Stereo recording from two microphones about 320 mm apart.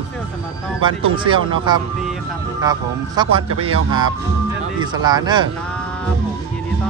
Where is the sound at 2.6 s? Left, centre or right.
Centre.